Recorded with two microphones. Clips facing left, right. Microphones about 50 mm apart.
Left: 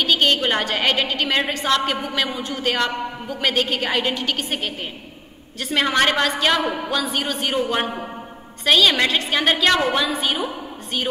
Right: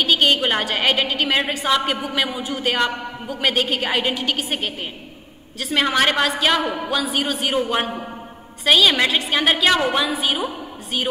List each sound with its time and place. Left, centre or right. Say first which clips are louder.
0.0 s a man's voice: right 1 dB; centre